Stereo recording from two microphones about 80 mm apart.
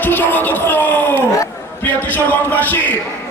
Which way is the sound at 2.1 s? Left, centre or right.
Left.